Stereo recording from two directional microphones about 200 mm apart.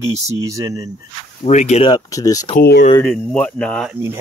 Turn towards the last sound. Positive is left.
turn(degrees=5)  # may be behind; listen again after turning